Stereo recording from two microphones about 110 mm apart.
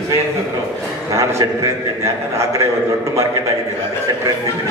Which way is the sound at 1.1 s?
25° right (ahead or behind).